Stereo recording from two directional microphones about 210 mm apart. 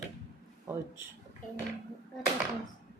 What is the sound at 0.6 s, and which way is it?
Speech, 10° right (ahead or behind).